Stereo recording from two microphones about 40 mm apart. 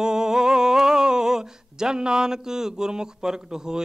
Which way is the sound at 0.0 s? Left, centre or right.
Centre.